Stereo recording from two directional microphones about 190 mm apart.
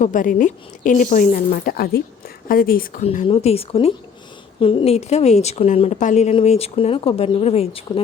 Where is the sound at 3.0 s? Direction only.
35° left (ahead or behind).